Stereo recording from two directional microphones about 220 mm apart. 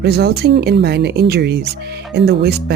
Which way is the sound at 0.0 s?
45° right (ahead or behind).